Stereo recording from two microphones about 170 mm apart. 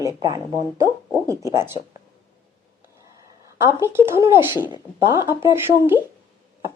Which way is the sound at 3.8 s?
15° right (ahead or behind).